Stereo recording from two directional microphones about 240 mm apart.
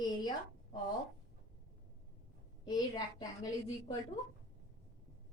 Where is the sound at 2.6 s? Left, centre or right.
Centre.